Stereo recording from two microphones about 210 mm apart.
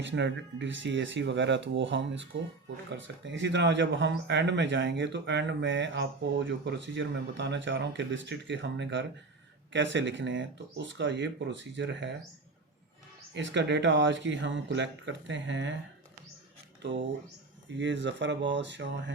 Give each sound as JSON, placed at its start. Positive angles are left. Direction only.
{"t": 0.0, "sound": "speech", "side_deg": -60}
{"t": 13.3, "sound": "speech", "side_deg": -55}
{"t": 17.7, "sound": "speech", "side_deg": -60}